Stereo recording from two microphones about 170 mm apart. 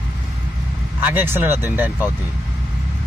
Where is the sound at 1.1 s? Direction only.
10° right (ahead or behind).